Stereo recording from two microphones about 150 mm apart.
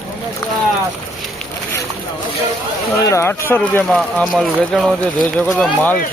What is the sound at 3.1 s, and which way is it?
Speech, 20° left (ahead or behind).